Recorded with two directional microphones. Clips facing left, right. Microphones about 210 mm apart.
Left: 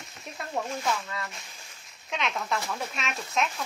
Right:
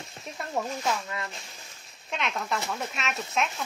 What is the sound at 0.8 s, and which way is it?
Speech, 20° right (ahead or behind).